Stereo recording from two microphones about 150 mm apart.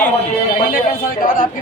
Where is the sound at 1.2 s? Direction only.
65° left (ahead or behind).